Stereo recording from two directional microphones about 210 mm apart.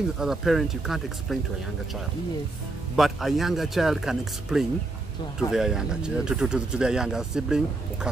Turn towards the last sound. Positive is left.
turn(degrees=-5)  # may be behind; listen again after turning